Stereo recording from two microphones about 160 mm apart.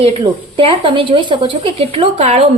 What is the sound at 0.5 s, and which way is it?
A woman's voice, 30° right (ahead or behind).